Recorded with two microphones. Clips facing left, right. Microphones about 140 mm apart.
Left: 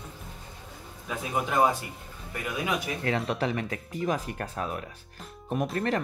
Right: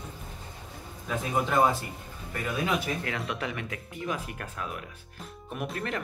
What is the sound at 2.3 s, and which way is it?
Speech, 15° left (ahead or behind).